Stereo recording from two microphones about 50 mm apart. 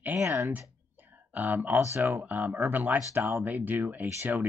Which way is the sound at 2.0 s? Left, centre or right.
Right.